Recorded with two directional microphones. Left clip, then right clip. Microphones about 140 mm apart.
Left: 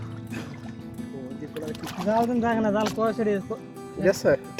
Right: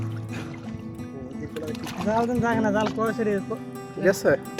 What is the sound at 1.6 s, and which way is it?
Speech, 10° right (ahead or behind).